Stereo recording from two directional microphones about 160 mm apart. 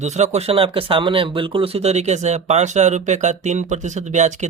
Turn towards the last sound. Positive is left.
turn(degrees=-45)  # may be behind; listen again after turning